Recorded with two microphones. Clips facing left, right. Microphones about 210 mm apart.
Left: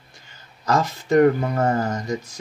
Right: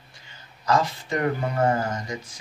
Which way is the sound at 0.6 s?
45° left (ahead or behind).